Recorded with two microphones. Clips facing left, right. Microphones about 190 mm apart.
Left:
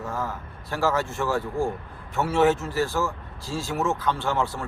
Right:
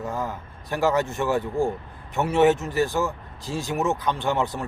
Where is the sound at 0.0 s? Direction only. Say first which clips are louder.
Right 1 dB; 15° right (ahead or behind).